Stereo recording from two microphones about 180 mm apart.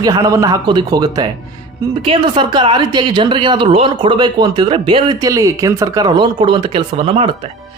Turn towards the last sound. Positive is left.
turn(degrees=-30)  # may be behind; listen again after turning